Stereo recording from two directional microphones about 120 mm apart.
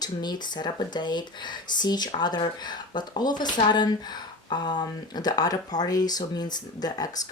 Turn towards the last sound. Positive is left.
turn(degrees=35)  # may be behind; listen again after turning